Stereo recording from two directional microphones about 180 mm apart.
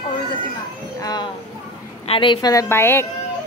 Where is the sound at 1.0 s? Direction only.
20° left (ahead or behind).